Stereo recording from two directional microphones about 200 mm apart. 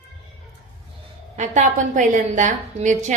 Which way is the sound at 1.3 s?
35° right (ahead or behind).